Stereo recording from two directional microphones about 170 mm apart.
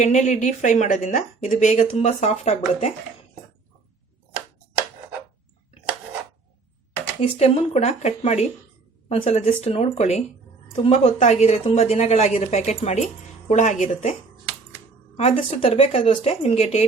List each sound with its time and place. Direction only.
0.0 s speech: 45° left (ahead or behind)
7.2 s a woman's voice: 35° left (ahead or behind)